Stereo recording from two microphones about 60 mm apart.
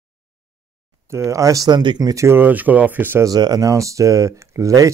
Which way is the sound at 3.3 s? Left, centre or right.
Right.